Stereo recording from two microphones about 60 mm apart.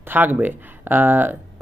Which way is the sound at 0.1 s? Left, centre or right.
Right.